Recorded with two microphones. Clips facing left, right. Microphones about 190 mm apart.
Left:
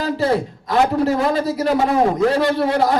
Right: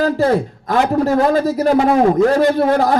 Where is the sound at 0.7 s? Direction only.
45° right (ahead or behind).